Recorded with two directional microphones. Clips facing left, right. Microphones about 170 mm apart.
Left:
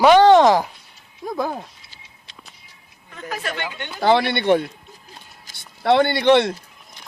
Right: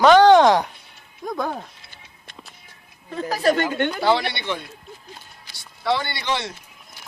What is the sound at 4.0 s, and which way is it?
Speech, 55° left (ahead or behind).